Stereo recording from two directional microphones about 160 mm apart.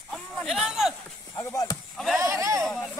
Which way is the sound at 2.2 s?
20° right (ahead or behind).